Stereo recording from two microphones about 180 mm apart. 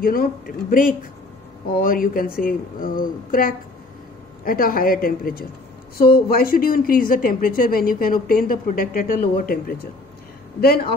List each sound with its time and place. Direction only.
0.0 s speech: 55° left (ahead or behind)